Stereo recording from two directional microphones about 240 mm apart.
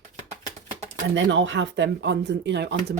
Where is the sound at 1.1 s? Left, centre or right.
Right.